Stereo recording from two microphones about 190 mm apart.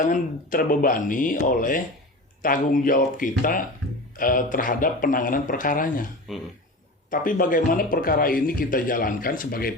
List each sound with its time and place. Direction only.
0.0 s speech: 45° left (ahead or behind)
6.3 s speech: centre (ahead or behind)
7.1 s speech: 45° left (ahead or behind)